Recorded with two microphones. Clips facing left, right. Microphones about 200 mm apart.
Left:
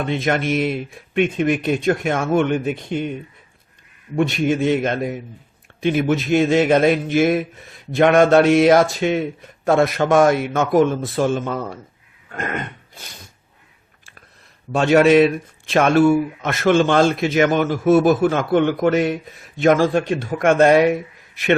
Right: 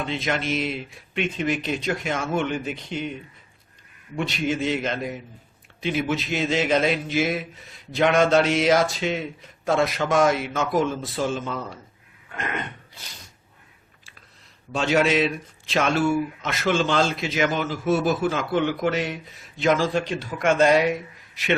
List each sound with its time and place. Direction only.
0.0 s speech: 55° left (ahead or behind)
14.7 s speech: 55° left (ahead or behind)